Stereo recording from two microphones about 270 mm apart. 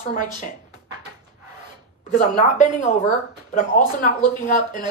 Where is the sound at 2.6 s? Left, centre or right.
Left.